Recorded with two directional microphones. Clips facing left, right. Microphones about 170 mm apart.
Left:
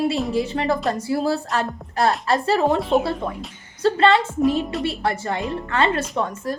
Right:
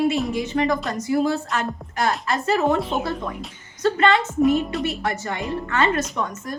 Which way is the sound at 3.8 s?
30° left (ahead or behind).